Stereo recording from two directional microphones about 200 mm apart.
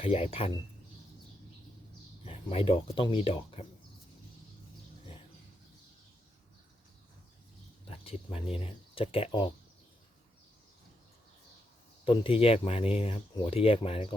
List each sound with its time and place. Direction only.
0.0 s speech: 30° left (ahead or behind)
2.2 s speech: 30° left (ahead or behind)
7.9 s speech: 30° left (ahead or behind)
12.0 s speech: 25° left (ahead or behind)